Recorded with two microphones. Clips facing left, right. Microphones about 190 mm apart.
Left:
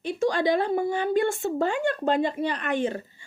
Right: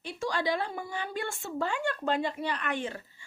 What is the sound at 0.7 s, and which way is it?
Speech, 55° left (ahead or behind).